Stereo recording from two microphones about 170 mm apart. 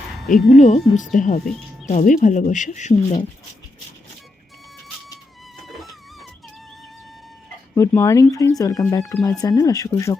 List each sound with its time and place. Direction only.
0.3 s speech: centre (ahead or behind)
0.6 s speech: 45° left (ahead or behind)
5.5 s music: centre (ahead or behind)
7.8 s speech: 15° left (ahead or behind)